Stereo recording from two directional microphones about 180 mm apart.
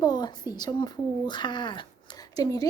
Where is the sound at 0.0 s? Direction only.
25° left (ahead or behind).